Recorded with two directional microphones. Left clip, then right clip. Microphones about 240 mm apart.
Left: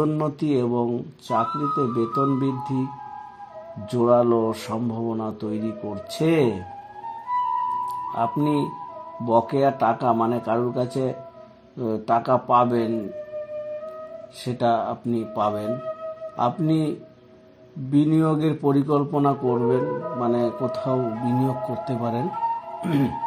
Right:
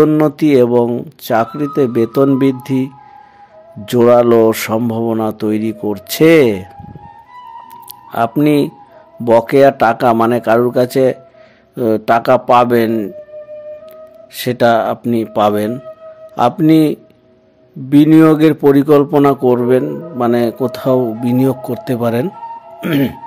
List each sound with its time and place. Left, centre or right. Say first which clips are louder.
0.0 s a man's voice: right 13 dB; right
3.8 s a man's voice: right 10 dB; right
7.8 s music: right 7 dB; right
9.2 s a man's voice: right 11 dB; right
14.4 s a man's voice: right 11 dB; right
17.9 s a man's voice: right 13 dB; right